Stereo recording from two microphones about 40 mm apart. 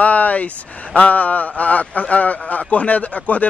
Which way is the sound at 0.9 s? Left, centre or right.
Left.